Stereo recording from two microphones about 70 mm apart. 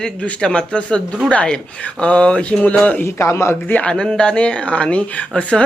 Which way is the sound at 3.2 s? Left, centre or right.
Left.